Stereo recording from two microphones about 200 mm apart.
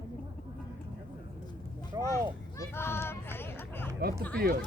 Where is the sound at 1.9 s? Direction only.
15° right (ahead or behind).